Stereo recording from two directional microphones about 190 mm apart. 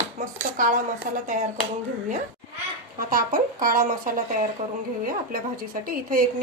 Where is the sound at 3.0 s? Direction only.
50° right (ahead or behind).